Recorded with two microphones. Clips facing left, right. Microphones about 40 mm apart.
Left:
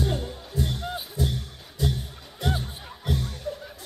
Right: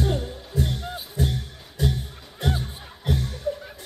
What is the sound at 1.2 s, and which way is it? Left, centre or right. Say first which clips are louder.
Music: right 2 dB; right.